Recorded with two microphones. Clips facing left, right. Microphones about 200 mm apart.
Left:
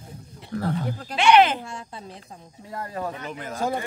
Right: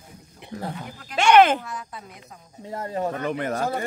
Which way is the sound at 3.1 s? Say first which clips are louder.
Right 7 dB; 60° right (ahead or behind).